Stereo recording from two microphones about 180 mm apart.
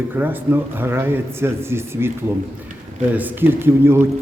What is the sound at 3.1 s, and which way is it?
Speech, 10° right (ahead or behind).